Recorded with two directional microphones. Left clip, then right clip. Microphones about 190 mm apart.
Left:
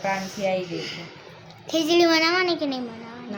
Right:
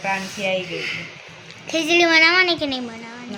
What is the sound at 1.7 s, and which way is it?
A woman's voice, centre (ahead or behind).